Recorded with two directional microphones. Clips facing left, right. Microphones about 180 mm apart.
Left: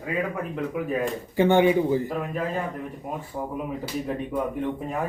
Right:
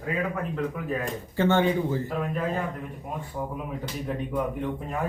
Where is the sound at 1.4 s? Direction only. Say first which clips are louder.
Left 4 dB; 15° left (ahead or behind).